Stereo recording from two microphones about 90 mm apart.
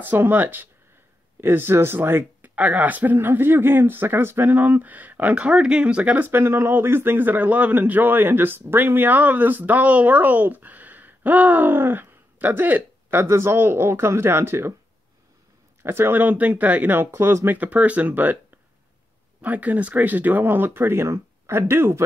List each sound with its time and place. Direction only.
0.0 s speech: 20° right (ahead or behind)
15.8 s speech: 25° right (ahead or behind)
17.6 s speech: 15° right (ahead or behind)
19.4 s speech: 20° right (ahead or behind)